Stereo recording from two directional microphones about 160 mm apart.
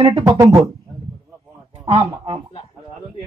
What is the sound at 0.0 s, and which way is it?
Speech, 30° right (ahead or behind).